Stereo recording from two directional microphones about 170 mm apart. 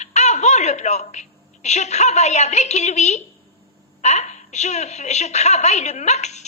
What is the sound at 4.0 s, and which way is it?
A woman's voice, 40° left (ahead or behind).